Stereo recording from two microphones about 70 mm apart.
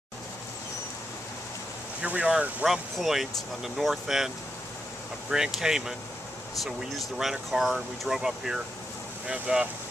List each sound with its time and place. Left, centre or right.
2.0 s speech: centre
2.6 s speech: centre
5.3 s speech: centre